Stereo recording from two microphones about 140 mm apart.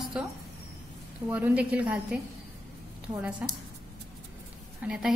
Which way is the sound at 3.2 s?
10° right (ahead or behind).